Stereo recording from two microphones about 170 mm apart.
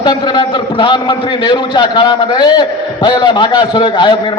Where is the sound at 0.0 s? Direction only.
25° left (ahead or behind).